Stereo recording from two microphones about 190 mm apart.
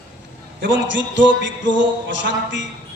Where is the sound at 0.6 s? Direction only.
70° right (ahead or behind).